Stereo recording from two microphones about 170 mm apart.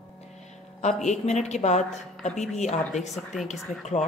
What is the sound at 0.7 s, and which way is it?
A woman's voice, 45° left (ahead or behind).